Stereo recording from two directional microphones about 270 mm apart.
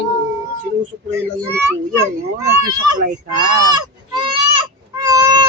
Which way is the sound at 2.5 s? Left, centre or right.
Right.